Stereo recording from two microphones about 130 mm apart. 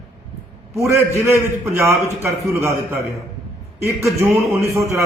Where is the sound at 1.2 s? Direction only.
20° right (ahead or behind).